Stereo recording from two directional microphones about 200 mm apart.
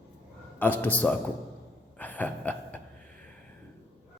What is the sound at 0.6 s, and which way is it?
Speech, 10° left (ahead or behind).